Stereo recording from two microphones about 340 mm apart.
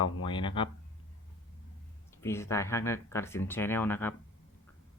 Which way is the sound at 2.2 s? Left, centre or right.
Centre.